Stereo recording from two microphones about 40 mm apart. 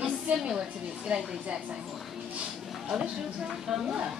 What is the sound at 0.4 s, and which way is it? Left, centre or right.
A woman's voice, right.